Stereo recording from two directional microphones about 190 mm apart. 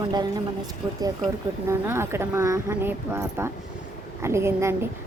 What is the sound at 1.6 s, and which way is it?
Speech, 15° right (ahead or behind).